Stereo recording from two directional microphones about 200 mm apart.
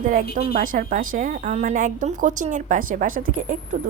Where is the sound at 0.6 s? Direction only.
45° right (ahead or behind).